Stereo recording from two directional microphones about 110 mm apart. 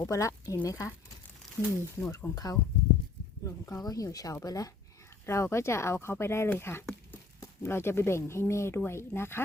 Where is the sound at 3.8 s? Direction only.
35° left (ahead or behind).